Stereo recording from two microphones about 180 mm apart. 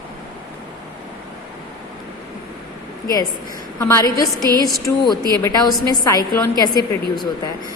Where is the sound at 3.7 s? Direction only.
20° left (ahead or behind).